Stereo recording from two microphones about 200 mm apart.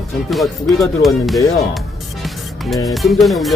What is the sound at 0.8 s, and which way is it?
Speech, 15° left (ahead or behind).